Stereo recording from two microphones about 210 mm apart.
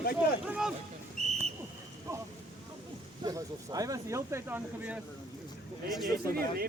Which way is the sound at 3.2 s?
15° right (ahead or behind).